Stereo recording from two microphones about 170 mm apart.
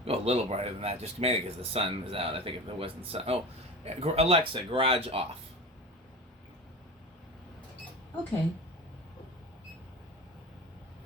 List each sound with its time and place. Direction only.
0.0 s speech: 35° right (ahead or behind)